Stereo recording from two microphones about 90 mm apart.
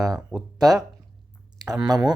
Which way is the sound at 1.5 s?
45° right (ahead or behind).